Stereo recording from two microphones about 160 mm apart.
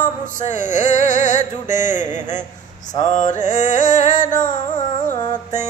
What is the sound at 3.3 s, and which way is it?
Carnatic music, 50° left (ahead or behind).